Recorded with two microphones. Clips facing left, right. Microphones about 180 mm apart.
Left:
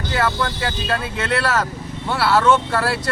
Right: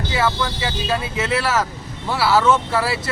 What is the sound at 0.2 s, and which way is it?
Speech, centre (ahead or behind).